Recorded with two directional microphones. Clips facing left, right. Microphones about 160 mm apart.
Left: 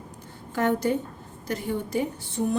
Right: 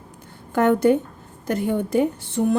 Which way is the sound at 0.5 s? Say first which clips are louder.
Right 7 dB; 55° right (ahead or behind).